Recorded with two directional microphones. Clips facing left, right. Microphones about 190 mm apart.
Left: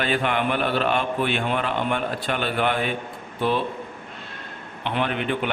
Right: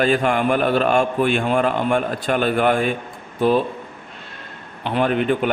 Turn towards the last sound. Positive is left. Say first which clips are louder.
# right 6 dB
turn(degrees=-40)  # may be behind; listen again after turning